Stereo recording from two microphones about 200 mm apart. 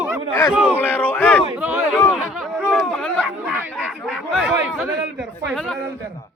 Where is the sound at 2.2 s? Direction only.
Centre (ahead or behind).